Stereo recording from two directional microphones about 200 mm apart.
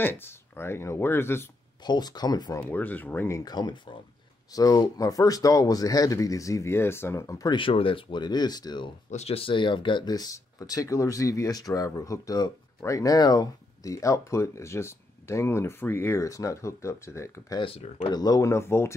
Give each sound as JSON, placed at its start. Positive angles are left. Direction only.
{"t": 0.0, "sound": "speech", "side_deg": 10}
{"t": 2.7, "sound": "speech", "side_deg": 10}
{"t": 17.7, "sound": "speech", "side_deg": 30}
{"t": 18.1, "sound": "speech", "side_deg": 20}